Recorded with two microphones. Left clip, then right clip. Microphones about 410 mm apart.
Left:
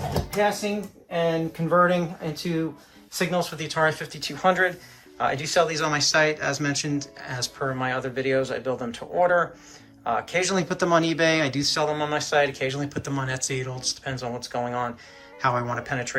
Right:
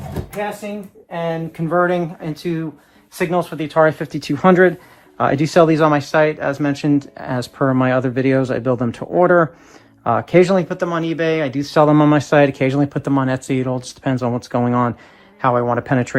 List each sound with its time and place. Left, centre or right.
0.3 s speech: centre
1.7 s speech: centre